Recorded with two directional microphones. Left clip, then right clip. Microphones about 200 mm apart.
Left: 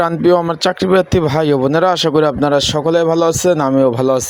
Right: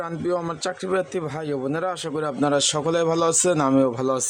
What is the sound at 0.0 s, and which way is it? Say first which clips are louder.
Speech: left 13 dB; 35° left (ahead or behind).